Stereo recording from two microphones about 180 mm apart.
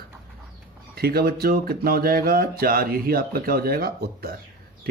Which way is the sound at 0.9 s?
60° right (ahead or behind).